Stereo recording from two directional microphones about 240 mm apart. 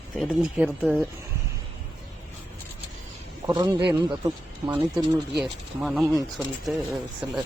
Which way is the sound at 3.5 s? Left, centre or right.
Centre.